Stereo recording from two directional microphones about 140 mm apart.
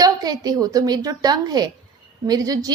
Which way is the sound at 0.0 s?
25° right (ahead or behind).